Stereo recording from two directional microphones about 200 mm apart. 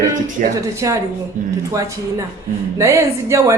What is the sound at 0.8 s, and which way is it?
Speech, 15° right (ahead or behind).